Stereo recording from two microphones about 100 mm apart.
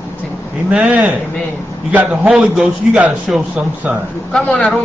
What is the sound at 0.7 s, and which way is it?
Speech, 15° right (ahead or behind).